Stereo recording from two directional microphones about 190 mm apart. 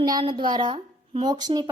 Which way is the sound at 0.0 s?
20° right (ahead or behind).